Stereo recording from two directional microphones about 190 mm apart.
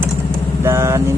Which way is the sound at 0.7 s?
15° right (ahead or behind).